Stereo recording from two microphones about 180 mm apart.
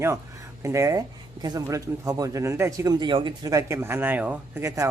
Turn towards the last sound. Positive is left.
turn(degrees=-15)  # may be behind; listen again after turning